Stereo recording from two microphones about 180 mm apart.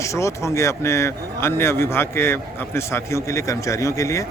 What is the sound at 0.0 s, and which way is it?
Speech, 15° left (ahead or behind).